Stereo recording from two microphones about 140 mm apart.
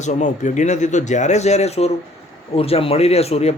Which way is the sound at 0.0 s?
60° left (ahead or behind).